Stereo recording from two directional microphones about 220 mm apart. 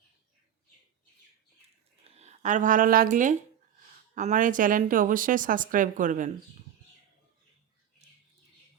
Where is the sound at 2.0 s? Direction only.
30° right (ahead or behind).